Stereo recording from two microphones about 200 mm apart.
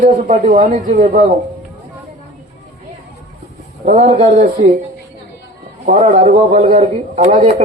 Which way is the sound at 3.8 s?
35° right (ahead or behind).